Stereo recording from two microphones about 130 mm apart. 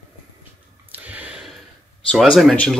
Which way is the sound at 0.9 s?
10° right (ahead or behind).